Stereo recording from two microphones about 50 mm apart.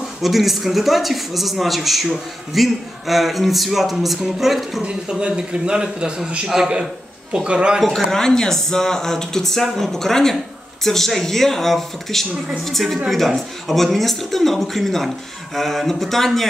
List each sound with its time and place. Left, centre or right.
0.2 s a man's voice: centre
5.2 s a man's voice: centre
8.1 s a man's voice: centre